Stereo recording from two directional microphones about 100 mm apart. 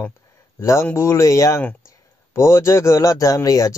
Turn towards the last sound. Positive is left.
turn(degrees=35)  # may be behind; listen again after turning